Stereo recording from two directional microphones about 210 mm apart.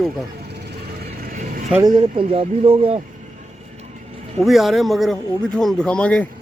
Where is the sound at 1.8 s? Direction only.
25° right (ahead or behind).